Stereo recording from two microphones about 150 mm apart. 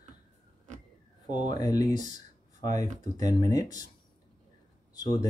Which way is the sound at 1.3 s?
30° left (ahead or behind).